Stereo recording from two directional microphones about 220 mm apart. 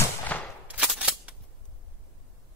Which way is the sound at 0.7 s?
5° right (ahead or behind).